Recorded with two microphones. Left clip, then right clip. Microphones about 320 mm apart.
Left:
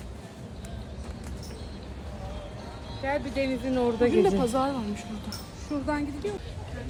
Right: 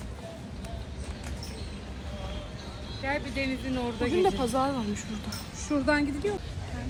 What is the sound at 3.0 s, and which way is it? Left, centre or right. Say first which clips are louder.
Speech: left 3 dB; left.